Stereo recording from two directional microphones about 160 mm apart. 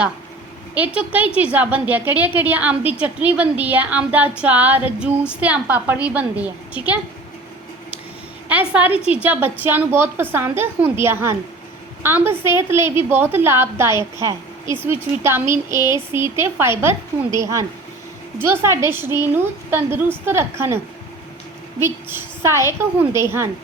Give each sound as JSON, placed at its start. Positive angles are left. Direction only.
{"t": 0.7, "sound": "a woman's voice", "side_deg": -10}
{"t": 8.4, "sound": "a woman's voice", "side_deg": -10}